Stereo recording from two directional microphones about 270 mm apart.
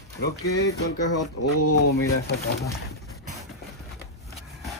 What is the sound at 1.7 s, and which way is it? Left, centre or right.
Speech, left.